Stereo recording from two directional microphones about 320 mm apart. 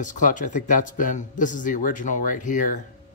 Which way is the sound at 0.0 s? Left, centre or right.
Left.